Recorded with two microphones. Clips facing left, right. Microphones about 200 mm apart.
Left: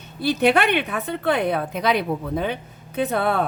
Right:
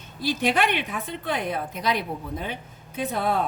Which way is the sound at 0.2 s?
65° left (ahead or behind).